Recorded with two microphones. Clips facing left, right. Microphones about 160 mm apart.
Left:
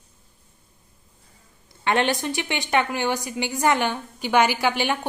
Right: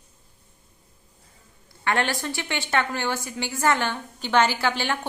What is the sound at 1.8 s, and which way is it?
A woman's voice, 20° left (ahead or behind).